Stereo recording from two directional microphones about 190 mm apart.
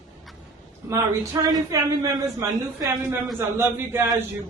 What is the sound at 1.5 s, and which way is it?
A woman's voice, 20° right (ahead or behind).